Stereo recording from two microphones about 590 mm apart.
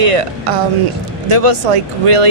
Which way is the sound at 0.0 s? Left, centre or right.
Right.